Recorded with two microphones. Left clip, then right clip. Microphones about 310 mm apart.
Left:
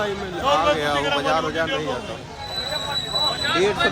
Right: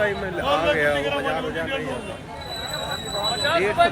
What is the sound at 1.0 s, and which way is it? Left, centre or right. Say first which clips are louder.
Speech: left 3 dB; left.